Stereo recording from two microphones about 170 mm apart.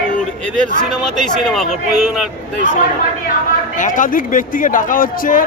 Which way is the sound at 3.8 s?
50° left (ahead or behind).